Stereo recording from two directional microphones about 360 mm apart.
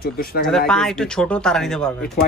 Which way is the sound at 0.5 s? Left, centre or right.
Centre.